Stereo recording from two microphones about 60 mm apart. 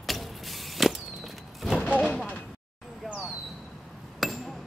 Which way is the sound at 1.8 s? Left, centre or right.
Centre.